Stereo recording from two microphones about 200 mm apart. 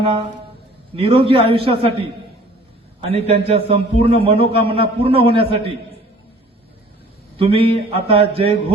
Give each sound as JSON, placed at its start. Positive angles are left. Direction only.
{"t": 0.9, "sound": "a man's voice", "side_deg": -25}
{"t": 7.3, "sound": "a man's voice", "side_deg": -30}